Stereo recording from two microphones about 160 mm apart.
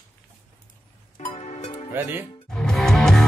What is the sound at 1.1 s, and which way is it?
Music, 40° left (ahead or behind).